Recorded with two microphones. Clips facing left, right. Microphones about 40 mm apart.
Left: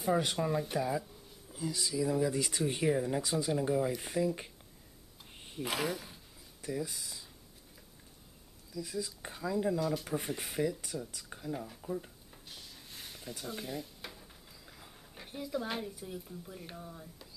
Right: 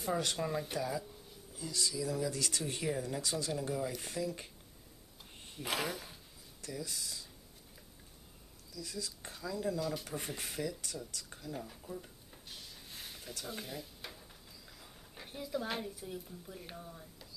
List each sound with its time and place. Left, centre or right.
0.0 s speech: centre
5.6 s a woman's voice: centre
6.6 s speech: centre
8.7 s speech: centre
9.8 s speech: centre
12.3 s a sound: centre
13.5 s stir: centre
15.1 s a woman's voice: centre